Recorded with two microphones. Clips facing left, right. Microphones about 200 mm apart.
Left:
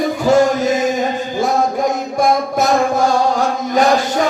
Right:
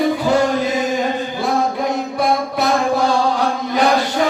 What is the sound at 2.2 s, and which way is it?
Music, 45° left (ahead or behind).